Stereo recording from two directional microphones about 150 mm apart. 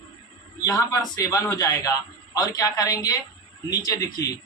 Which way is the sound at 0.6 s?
25° left (ahead or behind).